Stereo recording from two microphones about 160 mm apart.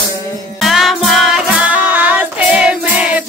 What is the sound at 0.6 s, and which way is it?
Music, centre (ahead or behind).